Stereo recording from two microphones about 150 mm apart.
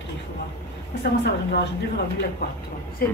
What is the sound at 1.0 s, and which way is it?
Speech, 90° left.